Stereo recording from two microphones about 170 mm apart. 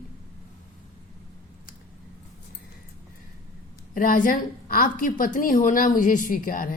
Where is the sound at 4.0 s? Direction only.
55° left (ahead or behind).